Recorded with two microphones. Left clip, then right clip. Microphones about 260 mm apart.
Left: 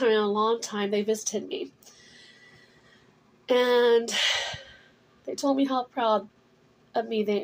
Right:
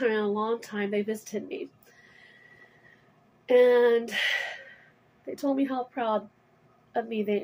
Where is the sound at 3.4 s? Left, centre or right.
Centre.